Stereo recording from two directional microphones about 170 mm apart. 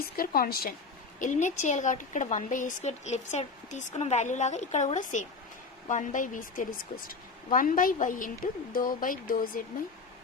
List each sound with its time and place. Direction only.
0.0 s speech: 60° left (ahead or behind)
1.2 s a woman's voice: 45° left (ahead or behind)